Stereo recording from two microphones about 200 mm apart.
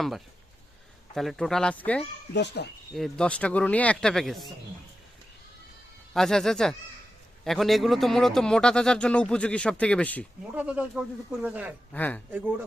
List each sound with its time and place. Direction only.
1.1 s a man's voice: centre (ahead or behind)
2.3 s speech: 60° left (ahead or behind)
2.9 s a man's voice: centre (ahead or behind)
6.1 s a man's voice: centre (ahead or behind)
10.5 s speech: 5° right (ahead or behind)
11.9 s a man's voice: 5° left (ahead or behind)